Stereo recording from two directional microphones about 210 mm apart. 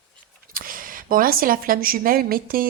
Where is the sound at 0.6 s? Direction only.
40° right (ahead or behind).